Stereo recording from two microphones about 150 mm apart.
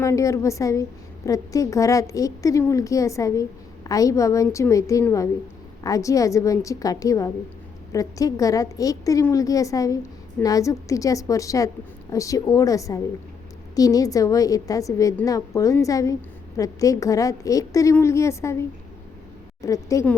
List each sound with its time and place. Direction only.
0.0 s a woman's voice: 20° left (ahead or behind)
19.6 s a woman's voice: 20° left (ahead or behind)